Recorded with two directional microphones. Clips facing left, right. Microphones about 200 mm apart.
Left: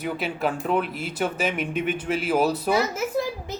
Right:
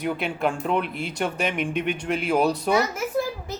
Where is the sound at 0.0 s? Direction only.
5° left (ahead or behind).